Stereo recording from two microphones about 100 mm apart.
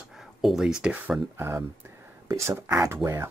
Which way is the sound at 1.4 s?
25° right (ahead or behind).